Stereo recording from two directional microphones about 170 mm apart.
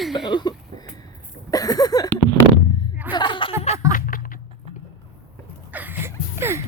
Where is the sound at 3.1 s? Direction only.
25° left (ahead or behind).